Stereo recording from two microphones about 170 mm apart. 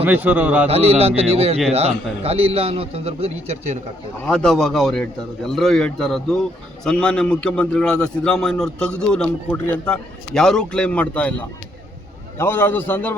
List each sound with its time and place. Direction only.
0.0 s speech: 10° right (ahead or behind)
0.7 s a man's voice: 35° right (ahead or behind)
4.3 s a man's voice: 5° left (ahead or behind)